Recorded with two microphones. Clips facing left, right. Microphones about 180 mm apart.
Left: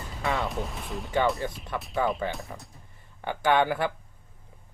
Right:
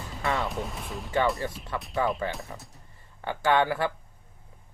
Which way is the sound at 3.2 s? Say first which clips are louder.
Even; 15° left (ahead or behind).